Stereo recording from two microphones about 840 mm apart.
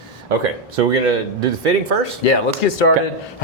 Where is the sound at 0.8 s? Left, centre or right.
Right.